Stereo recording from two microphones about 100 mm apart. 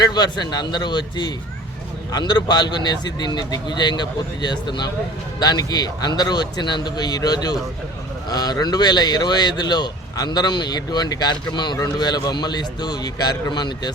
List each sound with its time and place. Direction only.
0.0 s speech: 45° left (ahead or behind)